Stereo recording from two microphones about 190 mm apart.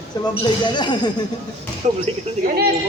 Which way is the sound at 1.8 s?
40° right (ahead or behind).